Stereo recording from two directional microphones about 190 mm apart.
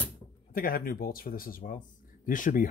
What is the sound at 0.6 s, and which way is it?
Speech, 50° left (ahead or behind).